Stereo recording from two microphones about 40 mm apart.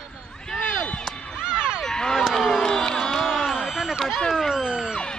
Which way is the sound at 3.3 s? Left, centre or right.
Centre.